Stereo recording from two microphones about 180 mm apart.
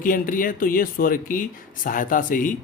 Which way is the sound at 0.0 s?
50° left (ahead or behind).